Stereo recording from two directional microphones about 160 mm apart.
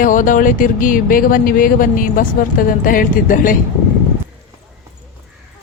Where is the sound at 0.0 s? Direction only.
55° left (ahead or behind).